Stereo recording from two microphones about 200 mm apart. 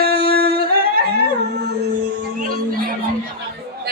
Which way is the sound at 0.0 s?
50° right (ahead or behind).